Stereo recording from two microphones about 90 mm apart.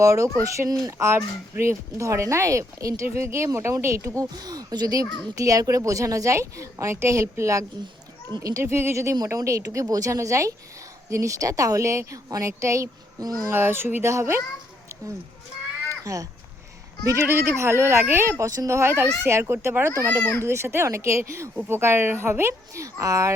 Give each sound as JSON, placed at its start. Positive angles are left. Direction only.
{"t": 0.0, "sound": "speech", "side_deg": -35}
{"t": 13.5, "sound": "speech", "side_deg": -25}
{"t": 15.9, "sound": "a sound", "side_deg": -35}
{"t": 17.0, "sound": "speech", "side_deg": -40}
{"t": 17.2, "sound": "speech", "side_deg": -30}